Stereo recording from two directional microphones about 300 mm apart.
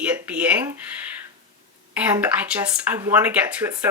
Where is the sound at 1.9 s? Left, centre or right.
Centre.